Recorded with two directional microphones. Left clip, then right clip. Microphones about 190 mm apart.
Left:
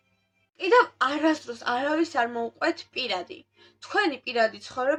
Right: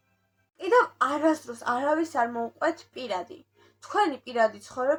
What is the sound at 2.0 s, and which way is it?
Speech, 25° left (ahead or behind).